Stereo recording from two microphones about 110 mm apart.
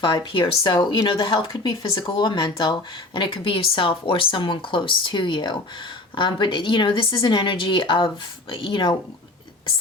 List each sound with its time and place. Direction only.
0.0 s a woman's voice: 45° left (ahead or behind)